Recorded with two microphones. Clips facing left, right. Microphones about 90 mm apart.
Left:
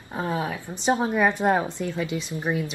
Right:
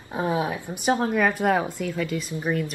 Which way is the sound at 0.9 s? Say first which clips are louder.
Left 1 dB; 5° left (ahead or behind).